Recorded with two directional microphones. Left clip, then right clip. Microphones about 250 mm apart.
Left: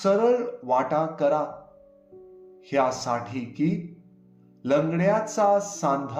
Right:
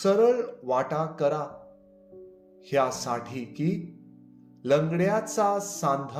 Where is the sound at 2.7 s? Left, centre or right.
Right.